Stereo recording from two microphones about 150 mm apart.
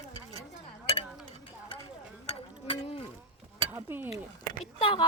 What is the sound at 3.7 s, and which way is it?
Speech, 15° right (ahead or behind).